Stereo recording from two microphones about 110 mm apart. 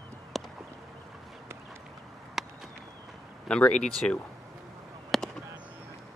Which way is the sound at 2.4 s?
Centre (ahead or behind).